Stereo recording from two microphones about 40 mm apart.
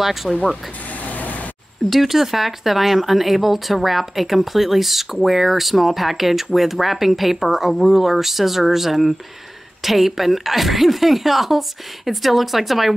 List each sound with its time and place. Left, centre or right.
0.0 s speech: centre
1.0 s vehicle: left
1.9 s speech: centre